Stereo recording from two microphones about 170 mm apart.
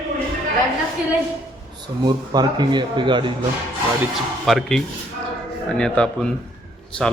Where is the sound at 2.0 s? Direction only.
25° right (ahead or behind).